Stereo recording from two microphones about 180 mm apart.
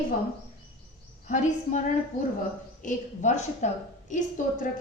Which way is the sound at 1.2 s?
40° left (ahead or behind).